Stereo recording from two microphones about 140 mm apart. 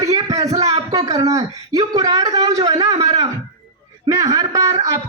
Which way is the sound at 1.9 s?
25° right (ahead or behind).